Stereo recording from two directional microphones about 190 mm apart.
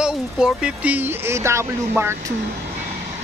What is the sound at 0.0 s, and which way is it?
Speech, 5° right (ahead or behind).